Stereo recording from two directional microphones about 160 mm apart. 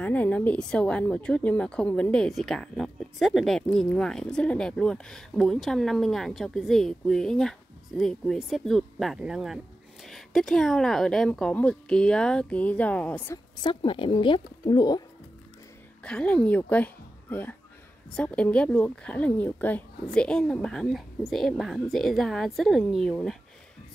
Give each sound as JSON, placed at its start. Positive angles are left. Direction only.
{"t": 0.0, "sound": "a woman's voice", "side_deg": 10}
{"t": 13.6, "sound": "speech", "side_deg": 30}
{"t": 16.0, "sound": "a woman's voice", "side_deg": 5}